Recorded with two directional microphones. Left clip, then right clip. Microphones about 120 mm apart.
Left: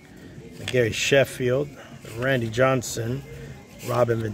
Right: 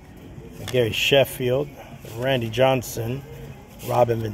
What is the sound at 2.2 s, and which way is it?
Speech, 35° left (ahead or behind).